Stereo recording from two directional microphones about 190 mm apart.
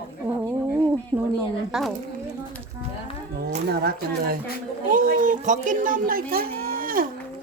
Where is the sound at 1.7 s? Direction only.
Centre (ahead or behind).